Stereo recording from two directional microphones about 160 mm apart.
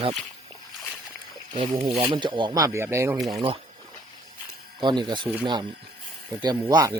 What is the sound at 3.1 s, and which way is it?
Speech, centre (ahead or behind).